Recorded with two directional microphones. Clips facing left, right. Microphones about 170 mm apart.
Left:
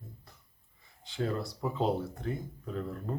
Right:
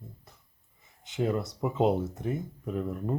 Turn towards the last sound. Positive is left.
turn(degrees=-15)  # may be behind; listen again after turning